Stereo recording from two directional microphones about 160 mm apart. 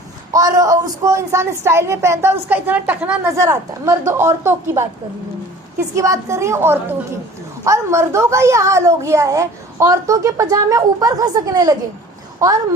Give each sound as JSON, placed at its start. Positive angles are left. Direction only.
{"t": 0.3, "sound": "a woman's voice", "side_deg": -20}
{"t": 6.0, "sound": "a woman's voice", "side_deg": -20}